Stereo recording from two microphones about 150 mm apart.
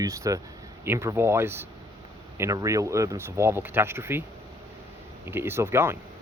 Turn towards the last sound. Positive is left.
turn(degrees=-15)  # may be behind; listen again after turning